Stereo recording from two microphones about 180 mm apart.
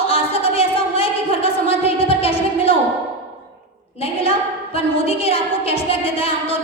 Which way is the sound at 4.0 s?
30° left (ahead or behind).